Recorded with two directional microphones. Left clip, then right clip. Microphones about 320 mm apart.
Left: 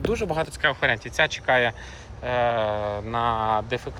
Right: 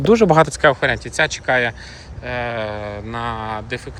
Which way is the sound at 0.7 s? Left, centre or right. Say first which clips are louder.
Right 4 dB; centre.